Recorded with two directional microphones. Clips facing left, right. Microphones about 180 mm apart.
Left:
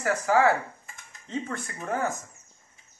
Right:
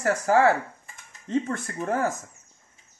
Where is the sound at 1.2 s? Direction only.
55° right (ahead or behind).